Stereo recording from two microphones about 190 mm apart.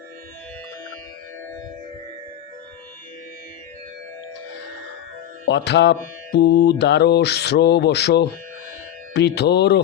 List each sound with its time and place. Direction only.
5.5 s mantra: 65° left (ahead or behind)